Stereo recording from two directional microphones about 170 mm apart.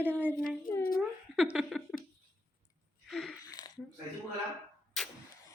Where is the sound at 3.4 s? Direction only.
20° left (ahead or behind).